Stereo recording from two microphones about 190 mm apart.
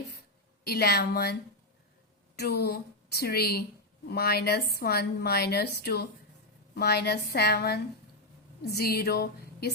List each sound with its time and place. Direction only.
0.6 s a woman's voice: 55° left (ahead or behind)